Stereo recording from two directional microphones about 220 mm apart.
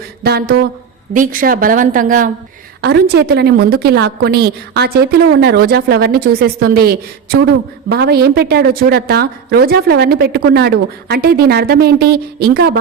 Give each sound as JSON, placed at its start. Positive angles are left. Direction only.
{"t": 0.2, "sound": "a woman's voice", "side_deg": -45}
{"t": 2.8, "sound": "a woman's voice", "side_deg": -50}